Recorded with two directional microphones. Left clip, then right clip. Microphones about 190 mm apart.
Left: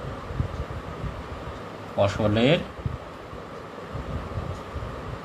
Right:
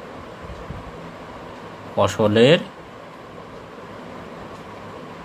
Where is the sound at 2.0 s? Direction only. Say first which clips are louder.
Right 7 dB; 50° right (ahead or behind).